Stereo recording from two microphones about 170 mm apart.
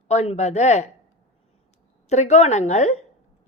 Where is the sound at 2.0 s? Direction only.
40° left (ahead or behind).